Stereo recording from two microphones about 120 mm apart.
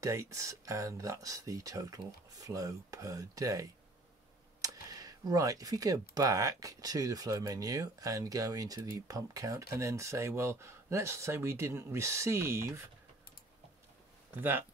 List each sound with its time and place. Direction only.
0.0 s speech: 25° right (ahead or behind)
14.3 s speech: 15° right (ahead or behind)